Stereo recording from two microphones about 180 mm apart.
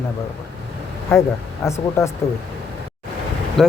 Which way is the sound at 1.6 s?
15° left (ahead or behind).